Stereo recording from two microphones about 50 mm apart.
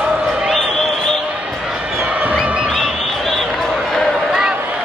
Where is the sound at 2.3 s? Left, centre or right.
Centre.